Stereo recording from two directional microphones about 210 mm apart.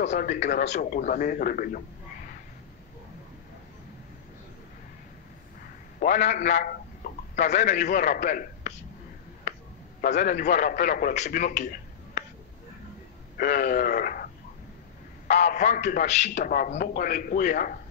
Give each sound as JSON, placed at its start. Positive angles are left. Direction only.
{"t": 0.0, "sound": "a man's voice", "side_deg": 35}
{"t": 5.9, "sound": "a man's voice", "side_deg": 35}
{"t": 10.0, "sound": "a man's voice", "side_deg": 35}
{"t": 13.4, "sound": "a man's voice", "side_deg": 40}
{"t": 15.2, "sound": "a man's voice", "side_deg": 35}